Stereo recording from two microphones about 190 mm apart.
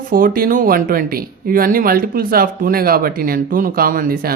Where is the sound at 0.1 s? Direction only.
50° right (ahead or behind).